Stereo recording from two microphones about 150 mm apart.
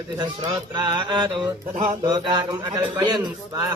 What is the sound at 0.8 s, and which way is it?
Speech, 30° right (ahead or behind).